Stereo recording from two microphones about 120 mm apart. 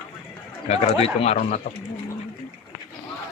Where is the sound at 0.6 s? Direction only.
60° left (ahead or behind).